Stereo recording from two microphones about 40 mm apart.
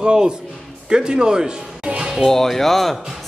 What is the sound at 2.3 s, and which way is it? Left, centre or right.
Speech, centre.